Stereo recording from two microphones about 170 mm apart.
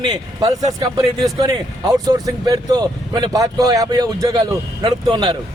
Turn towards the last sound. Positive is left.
turn(degrees=-25)  # may be behind; listen again after turning